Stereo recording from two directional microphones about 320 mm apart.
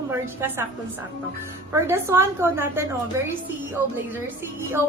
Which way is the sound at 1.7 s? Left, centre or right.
Centre.